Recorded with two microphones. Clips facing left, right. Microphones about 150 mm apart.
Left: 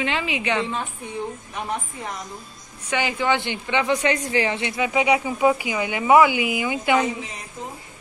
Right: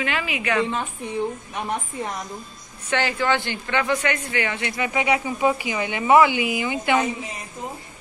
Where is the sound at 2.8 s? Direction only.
15° left (ahead or behind).